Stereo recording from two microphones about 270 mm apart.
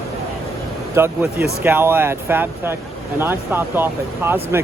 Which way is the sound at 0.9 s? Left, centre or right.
Centre.